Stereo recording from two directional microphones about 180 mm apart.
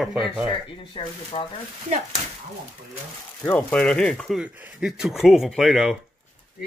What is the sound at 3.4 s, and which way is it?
Speech, 10° left (ahead or behind).